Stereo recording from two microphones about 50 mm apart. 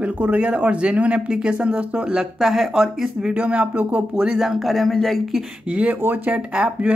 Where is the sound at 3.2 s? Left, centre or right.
Right.